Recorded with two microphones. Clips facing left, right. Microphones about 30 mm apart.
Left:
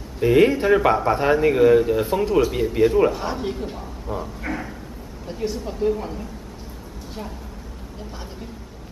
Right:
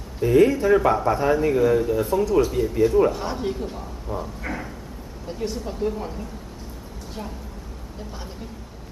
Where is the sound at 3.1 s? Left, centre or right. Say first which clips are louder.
Left 1 dB; centre.